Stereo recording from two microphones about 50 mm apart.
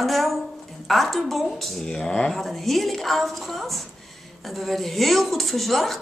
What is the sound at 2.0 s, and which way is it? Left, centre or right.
Speech, centre.